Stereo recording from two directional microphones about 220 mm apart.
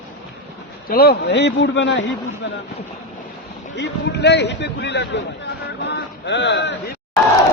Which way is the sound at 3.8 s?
50° left (ahead or behind).